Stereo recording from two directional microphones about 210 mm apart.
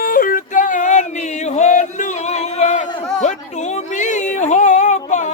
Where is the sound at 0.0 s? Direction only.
40° left (ahead or behind).